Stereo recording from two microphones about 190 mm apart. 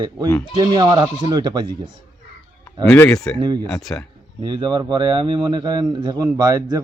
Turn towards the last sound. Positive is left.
turn(degrees=-20)  # may be behind; listen again after turning